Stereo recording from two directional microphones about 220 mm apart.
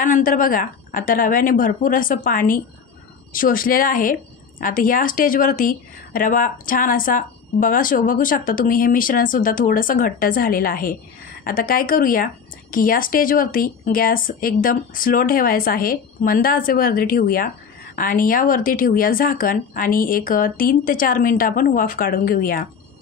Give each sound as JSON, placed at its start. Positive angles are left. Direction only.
{"t": 0.0, "sound": "a woman's voice", "side_deg": 40}